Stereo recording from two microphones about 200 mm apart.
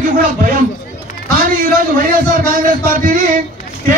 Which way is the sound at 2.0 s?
45° right (ahead or behind).